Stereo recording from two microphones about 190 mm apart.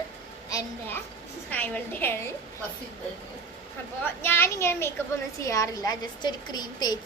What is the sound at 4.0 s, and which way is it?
A woman's voice, 10° left (ahead or behind).